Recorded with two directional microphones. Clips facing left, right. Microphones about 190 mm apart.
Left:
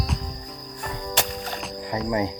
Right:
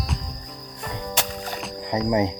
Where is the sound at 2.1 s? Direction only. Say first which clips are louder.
Right 3 dB; 20° right (ahead or behind).